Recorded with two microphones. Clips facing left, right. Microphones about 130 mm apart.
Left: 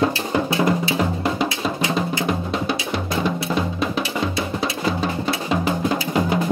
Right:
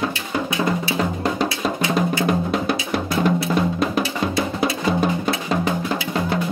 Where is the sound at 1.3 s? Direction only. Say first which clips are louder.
Right 1 dB; centre (ahead or behind).